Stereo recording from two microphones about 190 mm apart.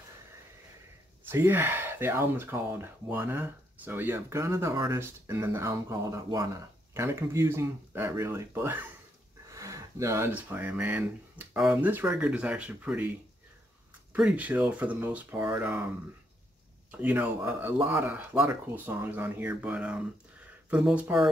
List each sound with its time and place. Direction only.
1.3 s speech: 10° right (ahead or behind)
14.1 s speech: 5° right (ahead or behind)
16.9 s speech: 10° right (ahead or behind)